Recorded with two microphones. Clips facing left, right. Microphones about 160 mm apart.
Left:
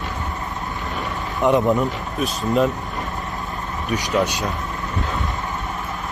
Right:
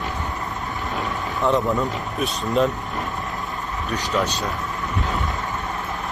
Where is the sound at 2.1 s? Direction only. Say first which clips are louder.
Left 2 dB; centre (ahead or behind).